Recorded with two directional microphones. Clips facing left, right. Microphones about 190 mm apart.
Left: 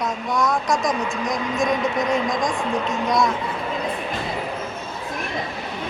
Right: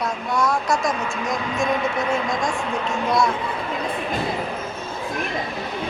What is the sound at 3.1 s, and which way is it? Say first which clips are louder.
Speech: even; centre (ahead or behind).